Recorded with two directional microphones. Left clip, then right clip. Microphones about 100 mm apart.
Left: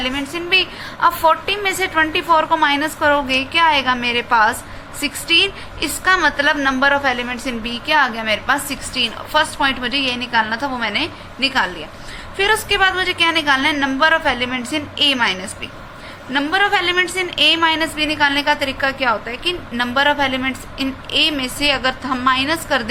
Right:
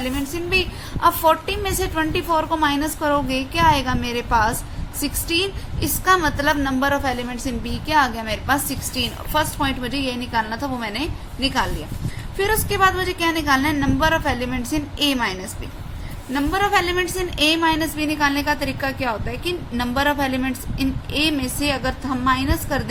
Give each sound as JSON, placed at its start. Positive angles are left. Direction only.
{"t": 0.0, "sound": "a woman's voice", "side_deg": -25}